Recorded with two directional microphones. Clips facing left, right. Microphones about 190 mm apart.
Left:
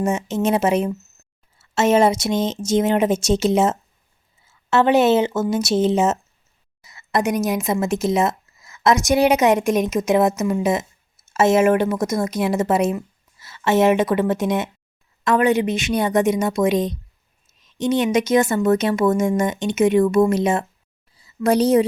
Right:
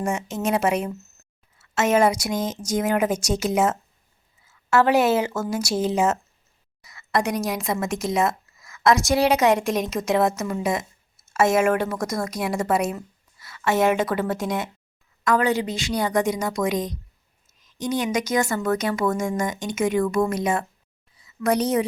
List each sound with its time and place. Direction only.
0.0 s speech: 25° left (ahead or behind)